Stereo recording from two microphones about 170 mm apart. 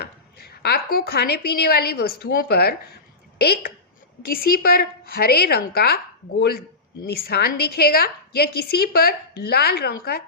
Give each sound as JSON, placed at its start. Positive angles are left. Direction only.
{"t": 0.0, "sound": "a woman's voice", "side_deg": 70}
{"t": 4.3, "sound": "a woman's voice", "side_deg": 60}
{"t": 7.0, "sound": "a woman's voice", "side_deg": 65}